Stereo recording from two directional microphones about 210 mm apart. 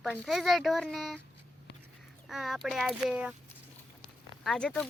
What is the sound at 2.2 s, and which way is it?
Speech, centre (ahead or behind).